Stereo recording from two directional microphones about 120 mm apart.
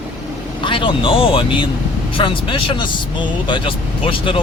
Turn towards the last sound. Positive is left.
turn(degrees=45)  # may be behind; listen again after turning